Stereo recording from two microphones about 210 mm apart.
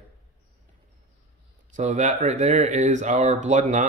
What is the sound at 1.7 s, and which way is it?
Speech, 35° right (ahead or behind).